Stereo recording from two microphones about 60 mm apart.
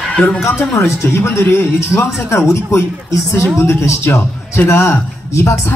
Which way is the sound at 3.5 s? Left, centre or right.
Left.